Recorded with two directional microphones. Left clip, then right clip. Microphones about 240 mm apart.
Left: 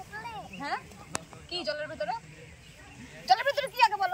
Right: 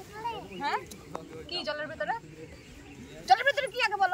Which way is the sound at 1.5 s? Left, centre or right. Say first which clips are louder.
Left 1 dB; right.